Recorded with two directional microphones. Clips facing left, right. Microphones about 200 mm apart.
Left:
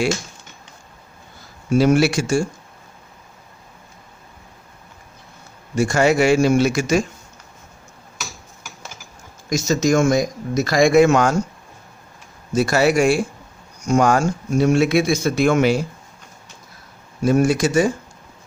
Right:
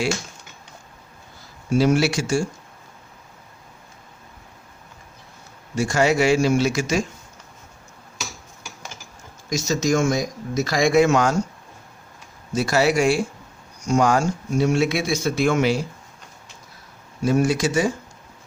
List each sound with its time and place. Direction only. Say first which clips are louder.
1.7 s a man's voice: left 3 dB; 55° left (ahead or behind)
5.7 s a man's voice: left 3 dB; 55° left (ahead or behind)
9.5 s speech: left 3 dB; 55° left (ahead or behind)
12.5 s speech: left 3 dB; 55° left (ahead or behind)
17.2 s speech: left 3 dB; 50° left (ahead or behind)